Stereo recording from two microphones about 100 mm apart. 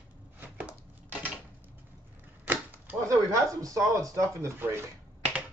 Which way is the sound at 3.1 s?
35° right (ahead or behind).